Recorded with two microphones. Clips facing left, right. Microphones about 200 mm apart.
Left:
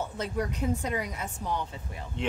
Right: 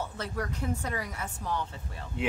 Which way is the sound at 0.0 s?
20° left (ahead or behind).